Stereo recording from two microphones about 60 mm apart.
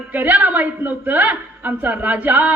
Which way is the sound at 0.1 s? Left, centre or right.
Right.